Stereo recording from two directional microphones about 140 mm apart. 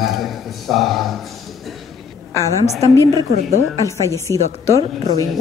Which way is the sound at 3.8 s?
20° left (ahead or behind).